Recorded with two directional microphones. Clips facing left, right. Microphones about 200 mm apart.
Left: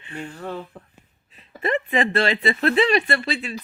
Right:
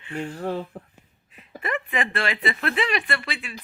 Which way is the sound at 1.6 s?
25° left (ahead or behind).